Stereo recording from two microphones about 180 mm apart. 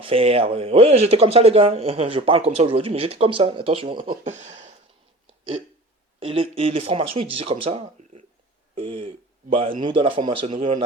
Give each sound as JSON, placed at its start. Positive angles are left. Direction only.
{"t": 0.0, "sound": "speech", "side_deg": -30}
{"t": 4.2, "sound": "speech", "side_deg": -40}
{"t": 6.1, "sound": "speech", "side_deg": -30}